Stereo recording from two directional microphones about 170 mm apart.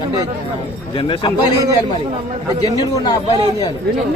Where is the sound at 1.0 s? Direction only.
30° left (ahead or behind).